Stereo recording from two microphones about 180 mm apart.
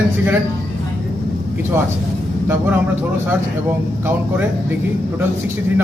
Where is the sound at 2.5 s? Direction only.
10° right (ahead or behind).